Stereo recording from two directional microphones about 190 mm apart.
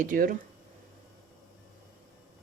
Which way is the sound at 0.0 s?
45° right (ahead or behind).